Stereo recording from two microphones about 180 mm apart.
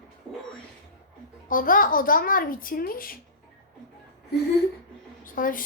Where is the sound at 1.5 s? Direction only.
50° left (ahead or behind).